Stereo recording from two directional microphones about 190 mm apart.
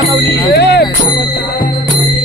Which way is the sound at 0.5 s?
60° left (ahead or behind).